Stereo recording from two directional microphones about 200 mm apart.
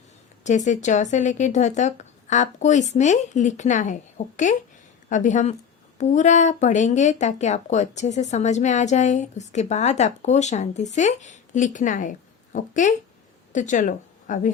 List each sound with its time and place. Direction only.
0.4 s speech: 35° left (ahead or behind)